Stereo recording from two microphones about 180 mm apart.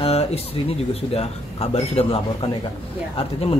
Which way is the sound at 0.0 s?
35° left (ahead or behind).